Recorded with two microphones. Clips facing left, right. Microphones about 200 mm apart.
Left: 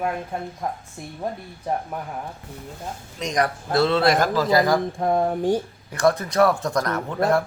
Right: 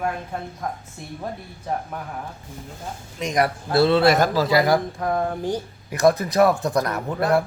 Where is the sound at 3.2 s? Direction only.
5° right (ahead or behind).